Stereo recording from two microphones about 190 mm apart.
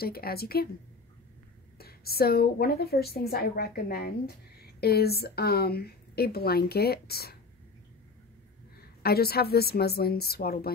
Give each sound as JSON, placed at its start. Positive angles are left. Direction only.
{"t": 0.0, "sound": "speech", "side_deg": 55}
{"t": 1.8, "sound": "speech", "side_deg": 55}
{"t": 9.0, "sound": "speech", "side_deg": 55}